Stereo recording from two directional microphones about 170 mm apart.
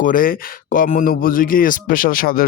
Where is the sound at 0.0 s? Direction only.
55° left (ahead or behind).